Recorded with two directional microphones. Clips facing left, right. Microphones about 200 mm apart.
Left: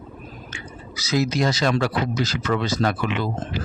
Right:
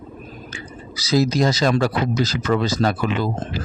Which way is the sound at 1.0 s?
35° right (ahead or behind).